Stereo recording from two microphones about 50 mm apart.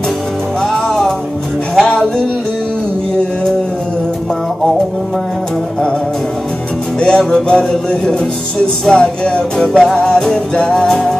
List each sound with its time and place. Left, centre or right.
0.6 s music: centre
7.0 s music: centre